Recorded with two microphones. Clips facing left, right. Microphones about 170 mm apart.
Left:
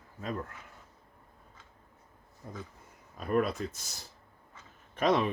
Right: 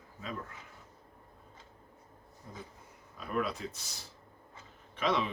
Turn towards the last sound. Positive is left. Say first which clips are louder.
# left 5 dB
turn(degrees=50)  # may be behind; listen again after turning